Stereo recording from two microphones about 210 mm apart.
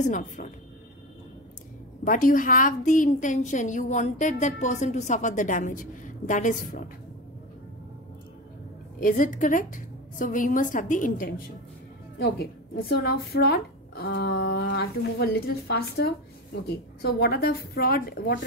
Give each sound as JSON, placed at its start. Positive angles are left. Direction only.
{"t": 0.0, "sound": "a woman's voice", "side_deg": 35}
{"t": 2.0, "sound": "a woman's voice", "side_deg": 40}
{"t": 9.0, "sound": "a woman's voice", "side_deg": 40}